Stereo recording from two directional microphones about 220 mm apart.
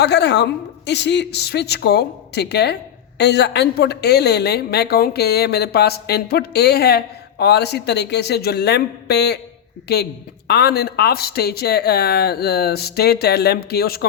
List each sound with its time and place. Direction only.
0.0 s a woman's voice: 50° left (ahead or behind)